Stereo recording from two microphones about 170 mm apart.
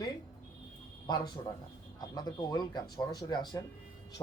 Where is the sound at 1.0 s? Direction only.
25° left (ahead or behind).